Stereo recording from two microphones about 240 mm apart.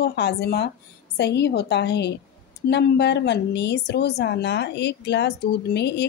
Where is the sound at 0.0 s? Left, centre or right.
Left.